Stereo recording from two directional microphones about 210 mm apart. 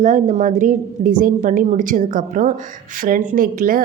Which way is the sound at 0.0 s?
35° right (ahead or behind).